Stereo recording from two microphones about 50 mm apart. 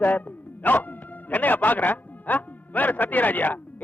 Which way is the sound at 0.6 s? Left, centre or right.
Left.